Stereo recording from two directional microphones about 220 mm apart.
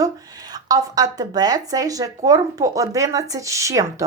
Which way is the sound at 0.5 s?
15° right (ahead or behind).